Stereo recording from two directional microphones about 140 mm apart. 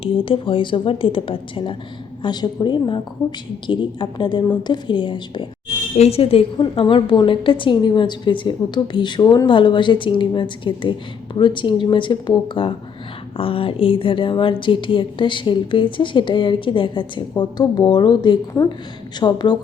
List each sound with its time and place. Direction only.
0.0 s a woman's voice: 40° left (ahead or behind)
6.0 s a woman's voice: 45° left (ahead or behind)
18.5 s a woman's voice: 20° left (ahead or behind)
19.2 s a woman's voice: 30° left (ahead or behind)